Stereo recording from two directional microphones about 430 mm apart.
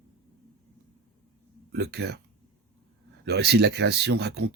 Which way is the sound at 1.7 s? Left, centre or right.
Right.